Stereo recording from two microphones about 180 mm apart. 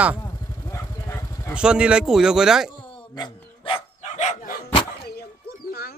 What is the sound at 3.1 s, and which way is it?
Dog, 25° left (ahead or behind).